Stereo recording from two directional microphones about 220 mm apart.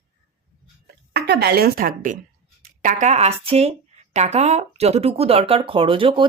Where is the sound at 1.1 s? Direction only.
50° right (ahead or behind).